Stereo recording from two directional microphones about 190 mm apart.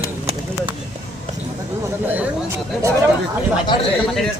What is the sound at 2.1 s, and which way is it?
Speech, 10° right (ahead or behind).